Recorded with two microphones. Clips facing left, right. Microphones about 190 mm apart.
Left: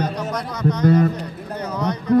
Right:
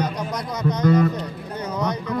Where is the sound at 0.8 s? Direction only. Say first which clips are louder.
Left 1 dB; 45° left (ahead or behind).